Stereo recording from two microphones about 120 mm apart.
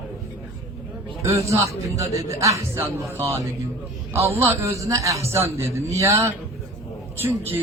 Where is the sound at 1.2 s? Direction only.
25° right (ahead or behind).